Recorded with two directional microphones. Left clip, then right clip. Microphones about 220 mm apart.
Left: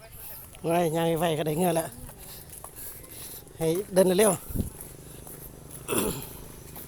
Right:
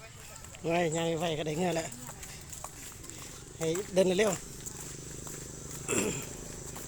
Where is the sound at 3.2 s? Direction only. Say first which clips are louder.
Left 5 dB; 35° left (ahead or behind).